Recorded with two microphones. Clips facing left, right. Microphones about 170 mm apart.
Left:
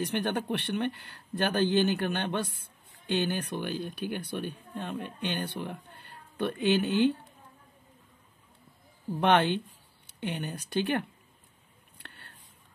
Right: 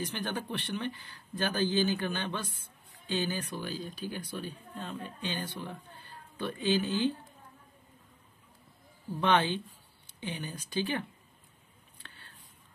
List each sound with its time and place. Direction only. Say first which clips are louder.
0.0 s speech: left 6 dB; 60° left (ahead or behind)
9.2 s speech: left 3 dB; 65° left (ahead or behind)
12.0 s a sound: left 3 dB; 60° left (ahead or behind)